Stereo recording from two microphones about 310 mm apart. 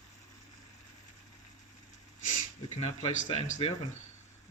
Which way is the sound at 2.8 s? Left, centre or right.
Left.